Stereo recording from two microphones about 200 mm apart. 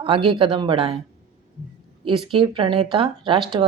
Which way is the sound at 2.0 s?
25° right (ahead or behind).